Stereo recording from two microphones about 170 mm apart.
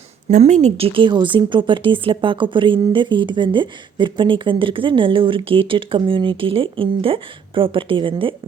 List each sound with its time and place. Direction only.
0.3 s speech: 45° right (ahead or behind)